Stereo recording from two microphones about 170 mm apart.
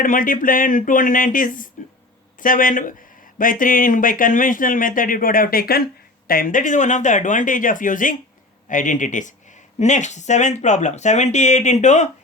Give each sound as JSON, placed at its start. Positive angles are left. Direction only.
{"t": 0.0, "sound": "speech", "side_deg": 55}